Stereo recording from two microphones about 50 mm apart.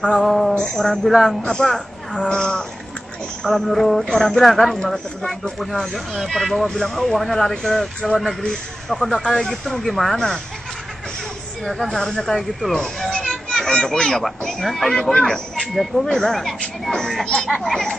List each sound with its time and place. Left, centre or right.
0.0 s speech: centre
3.4 s speech: centre
11.6 s speech: centre
13.2 s a sound: centre
13.9 s speech: centre
17.6 s speech: centre